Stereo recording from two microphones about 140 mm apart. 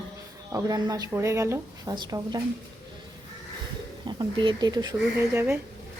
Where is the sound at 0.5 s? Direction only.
25° right (ahead or behind).